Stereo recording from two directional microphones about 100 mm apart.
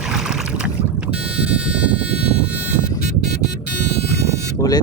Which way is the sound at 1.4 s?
10° right (ahead or behind).